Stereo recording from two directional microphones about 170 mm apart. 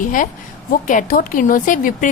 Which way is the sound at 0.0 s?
50° left (ahead or behind).